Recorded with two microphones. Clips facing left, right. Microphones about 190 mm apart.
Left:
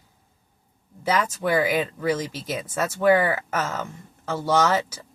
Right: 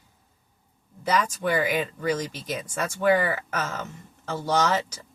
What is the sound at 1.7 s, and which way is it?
Speech, 10° left (ahead or behind).